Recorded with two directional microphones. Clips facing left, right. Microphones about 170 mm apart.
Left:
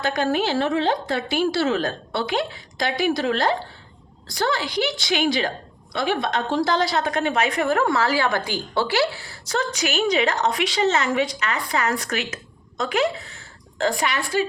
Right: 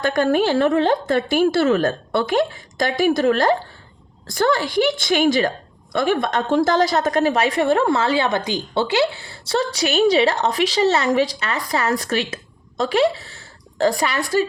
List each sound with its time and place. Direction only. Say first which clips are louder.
0.0 s a woman's voice: right 5 dB; 50° right (ahead or behind)